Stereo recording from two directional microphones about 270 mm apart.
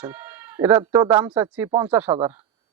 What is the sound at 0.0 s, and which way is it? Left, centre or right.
Speech, centre.